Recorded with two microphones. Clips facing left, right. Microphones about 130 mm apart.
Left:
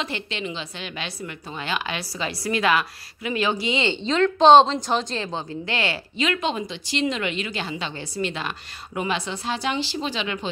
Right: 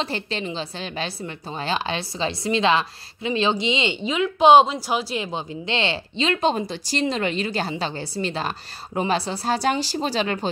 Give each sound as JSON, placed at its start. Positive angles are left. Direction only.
{"t": 0.0, "sound": "a woman's voice", "side_deg": -35}